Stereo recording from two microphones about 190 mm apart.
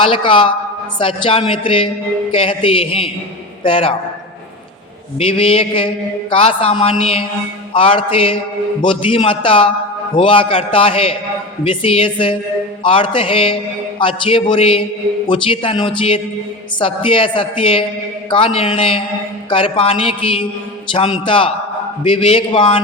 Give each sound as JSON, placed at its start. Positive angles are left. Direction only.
{"t": 0.0, "sound": "a woman's voice", "side_deg": 25}
{"t": 5.2, "sound": "a woman's voice", "side_deg": 30}